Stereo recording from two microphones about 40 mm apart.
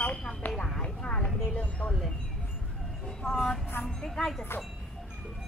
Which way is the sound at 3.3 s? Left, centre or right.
Centre.